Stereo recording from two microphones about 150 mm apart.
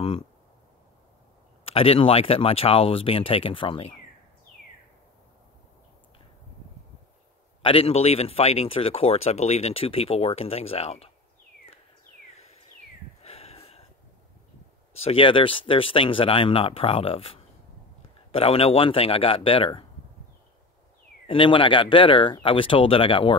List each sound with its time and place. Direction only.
1.6 s speech: 40° left (ahead or behind)
7.6 s speech: 40° left (ahead or behind)
13.2 s a sound: 40° left (ahead or behind)
15.0 s speech: 35° left (ahead or behind)
21.3 s speech: 35° left (ahead or behind)